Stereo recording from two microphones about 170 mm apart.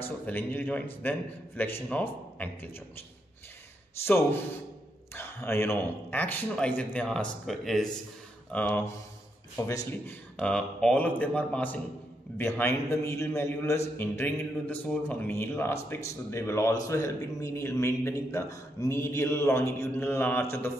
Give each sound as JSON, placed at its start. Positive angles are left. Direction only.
{"t": 0.0, "sound": "a man's voice", "side_deg": 10}
{"t": 4.0, "sound": "a man's voice", "side_deg": 15}
{"t": 10.3, "sound": "a man's voice", "side_deg": 5}